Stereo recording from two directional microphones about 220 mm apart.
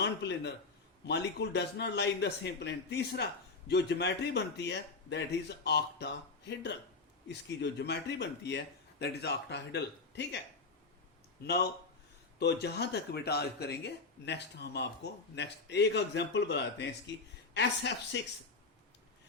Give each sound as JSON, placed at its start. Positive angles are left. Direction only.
{"t": 0.0, "sound": "a man's voice", "side_deg": 50}
{"t": 11.4, "sound": "speech", "side_deg": 45}